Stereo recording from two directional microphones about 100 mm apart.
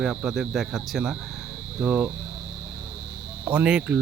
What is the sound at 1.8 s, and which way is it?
Speech, 10° right (ahead or behind).